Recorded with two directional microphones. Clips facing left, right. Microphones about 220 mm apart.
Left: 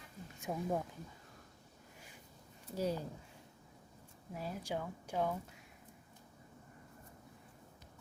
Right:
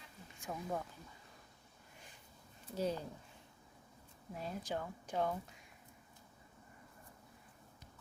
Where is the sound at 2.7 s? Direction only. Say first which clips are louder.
Left 1 dB; 10° left (ahead or behind).